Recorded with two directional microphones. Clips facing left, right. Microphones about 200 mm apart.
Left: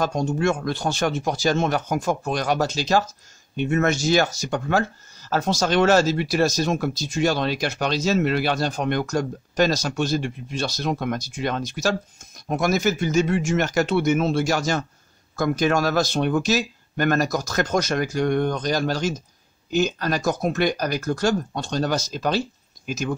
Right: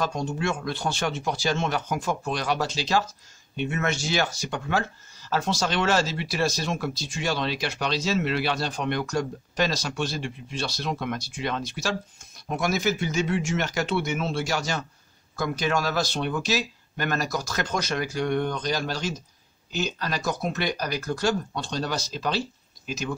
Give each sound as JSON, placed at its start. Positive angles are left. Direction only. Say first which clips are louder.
{"t": 0.0, "sound": "speech", "louder": "left 5 dB", "side_deg": 40}